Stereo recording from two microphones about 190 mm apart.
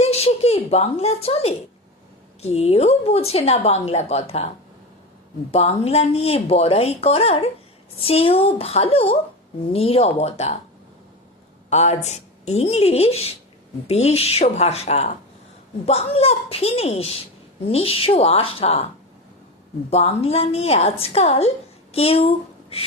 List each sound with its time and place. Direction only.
0.0 s a woman's voice: 35° left (ahead or behind)
5.5 s a woman's voice: 35° left (ahead or behind)
11.7 s a woman's voice: 35° left (ahead or behind)
19.9 s a woman's voice: 35° left (ahead or behind)